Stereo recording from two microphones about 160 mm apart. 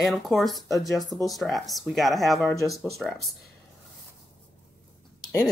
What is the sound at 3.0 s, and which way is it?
Speech, 5° left (ahead or behind).